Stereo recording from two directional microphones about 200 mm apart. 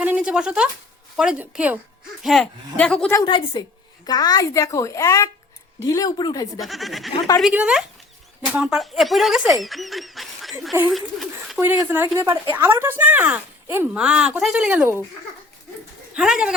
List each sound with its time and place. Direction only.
0.0 s a woman's voice: 5° right (ahead or behind)
3.2 s speech: 25° left (ahead or behind)
6.6 s a woman's voice: centre (ahead or behind)
12.2 s a woman's voice: 25° right (ahead or behind)
12.8 s a woman's voice: 10° right (ahead or behind)
16.1 s a woman's voice: 5° right (ahead or behind)